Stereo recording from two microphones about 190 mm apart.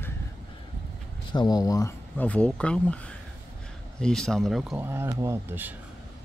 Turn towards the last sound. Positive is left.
turn(degrees=-10)  # may be behind; listen again after turning